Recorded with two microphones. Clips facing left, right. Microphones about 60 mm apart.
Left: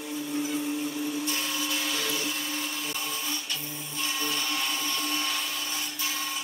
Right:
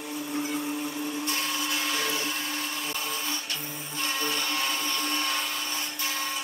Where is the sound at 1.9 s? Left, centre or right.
Right.